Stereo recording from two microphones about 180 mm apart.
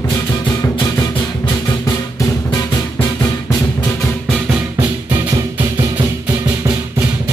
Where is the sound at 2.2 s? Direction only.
20° left (ahead or behind).